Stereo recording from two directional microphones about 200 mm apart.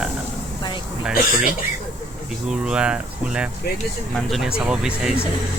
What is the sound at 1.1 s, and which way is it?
Speech, 45° left (ahead or behind).